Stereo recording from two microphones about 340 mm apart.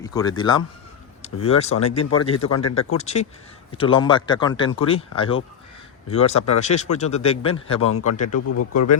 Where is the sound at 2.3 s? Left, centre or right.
Left.